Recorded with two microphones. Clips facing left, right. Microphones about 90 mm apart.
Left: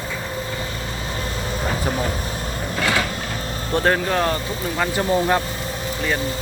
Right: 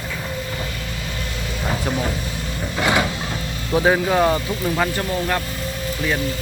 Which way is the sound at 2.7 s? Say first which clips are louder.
Right 2 dB; 20° right (ahead or behind).